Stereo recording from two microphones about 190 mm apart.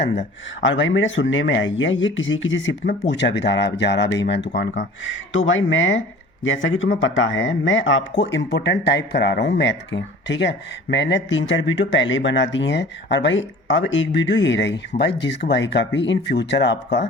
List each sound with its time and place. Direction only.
0.0 s speech: 70° left (ahead or behind)
5.0 s speech: 90° left
8.2 s speech: 70° left (ahead or behind)